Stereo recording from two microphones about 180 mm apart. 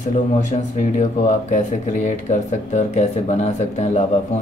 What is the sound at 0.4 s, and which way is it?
Speech, 45° left (ahead or behind).